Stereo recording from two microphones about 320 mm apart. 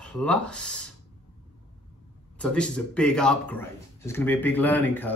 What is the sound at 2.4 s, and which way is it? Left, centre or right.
Speech, centre.